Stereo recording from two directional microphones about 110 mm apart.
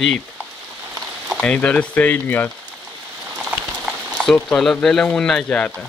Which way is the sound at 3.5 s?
20° right (ahead or behind).